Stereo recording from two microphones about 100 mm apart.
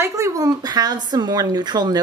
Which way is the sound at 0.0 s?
30° right (ahead or behind).